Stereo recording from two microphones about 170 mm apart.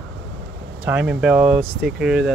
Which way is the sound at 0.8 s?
10° right (ahead or behind).